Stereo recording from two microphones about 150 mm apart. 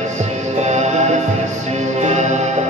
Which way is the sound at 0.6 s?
50° right (ahead or behind).